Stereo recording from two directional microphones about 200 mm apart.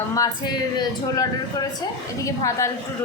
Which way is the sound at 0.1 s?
20° left (ahead or behind).